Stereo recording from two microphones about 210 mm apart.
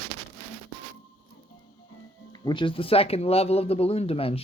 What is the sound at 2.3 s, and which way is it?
Speech, 20° left (ahead or behind).